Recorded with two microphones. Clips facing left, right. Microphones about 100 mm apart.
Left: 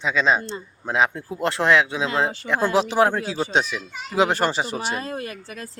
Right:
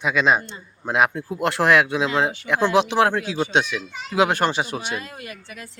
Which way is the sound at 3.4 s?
Centre (ahead or behind).